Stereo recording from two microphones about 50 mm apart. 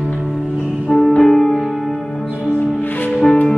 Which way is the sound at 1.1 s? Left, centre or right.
Centre.